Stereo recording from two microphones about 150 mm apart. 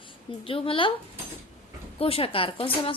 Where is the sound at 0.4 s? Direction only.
35° left (ahead or behind).